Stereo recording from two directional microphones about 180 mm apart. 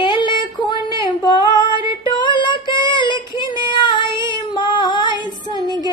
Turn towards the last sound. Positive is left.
turn(degrees=25)  # may be behind; listen again after turning